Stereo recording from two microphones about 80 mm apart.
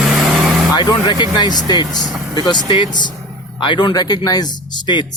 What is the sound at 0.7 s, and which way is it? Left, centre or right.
Speech, left.